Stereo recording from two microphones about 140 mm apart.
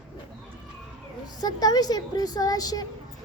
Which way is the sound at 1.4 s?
30° left (ahead or behind).